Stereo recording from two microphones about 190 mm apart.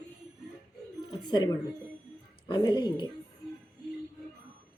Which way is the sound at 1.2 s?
25° left (ahead or behind).